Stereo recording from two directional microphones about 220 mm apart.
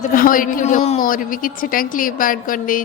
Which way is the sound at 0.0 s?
40° left (ahead or behind).